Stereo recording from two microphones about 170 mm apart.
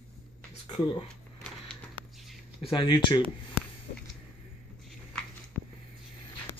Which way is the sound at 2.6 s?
30° left (ahead or behind).